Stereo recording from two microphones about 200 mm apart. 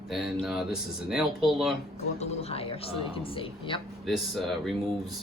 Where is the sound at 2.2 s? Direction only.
30° left (ahead or behind).